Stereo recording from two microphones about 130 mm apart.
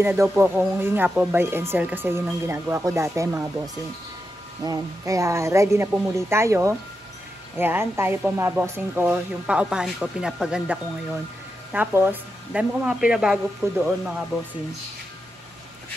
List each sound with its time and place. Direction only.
0.0 s speech: 20° right (ahead or behind)
4.6 s speech: 25° right (ahead or behind); by 13.4 s 5° right (ahead or behind)
13.7 s speech: 15° right (ahead or behind)